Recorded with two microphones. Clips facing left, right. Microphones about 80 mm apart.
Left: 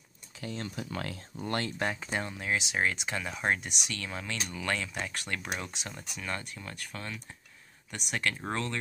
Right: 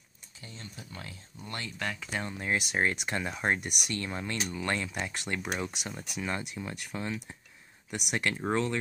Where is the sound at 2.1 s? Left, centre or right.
Centre.